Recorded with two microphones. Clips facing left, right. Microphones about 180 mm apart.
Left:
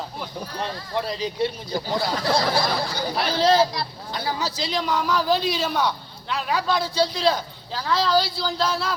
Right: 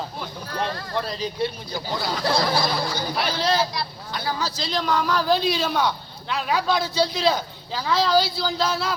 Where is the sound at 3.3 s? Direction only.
25° left (ahead or behind).